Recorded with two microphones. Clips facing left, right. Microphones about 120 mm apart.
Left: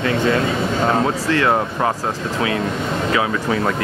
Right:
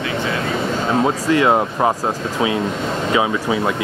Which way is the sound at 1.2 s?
15° right (ahead or behind).